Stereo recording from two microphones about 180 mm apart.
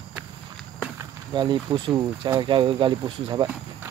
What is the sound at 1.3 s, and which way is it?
Speech, 25° right (ahead or behind).